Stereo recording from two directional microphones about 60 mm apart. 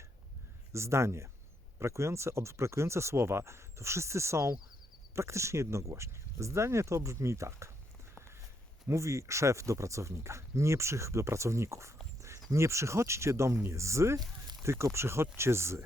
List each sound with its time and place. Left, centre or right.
0.7 s speech: right
8.9 s speech: right